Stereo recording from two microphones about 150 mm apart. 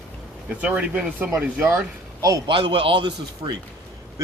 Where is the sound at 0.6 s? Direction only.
10° right (ahead or behind).